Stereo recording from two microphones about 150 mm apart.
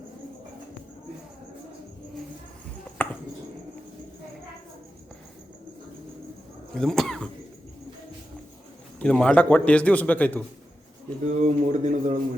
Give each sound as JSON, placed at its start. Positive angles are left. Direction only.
{"t": 3.0, "sound": "chopping", "side_deg": 10}
{"t": 6.7, "sound": "cough", "side_deg": 5}
{"t": 9.0, "sound": "a man's voice", "side_deg": 5}
{"t": 11.3, "sound": "speech", "side_deg": -50}